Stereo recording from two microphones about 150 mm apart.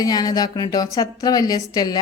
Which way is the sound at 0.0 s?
25° left (ahead or behind).